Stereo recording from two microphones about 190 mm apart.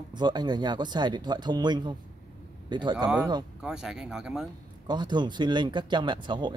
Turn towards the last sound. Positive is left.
turn(degrees=-25)  # may be behind; listen again after turning